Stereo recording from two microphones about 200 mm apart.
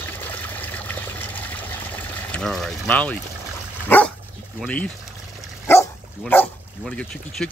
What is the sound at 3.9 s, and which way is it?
Speech, 10° left (ahead or behind).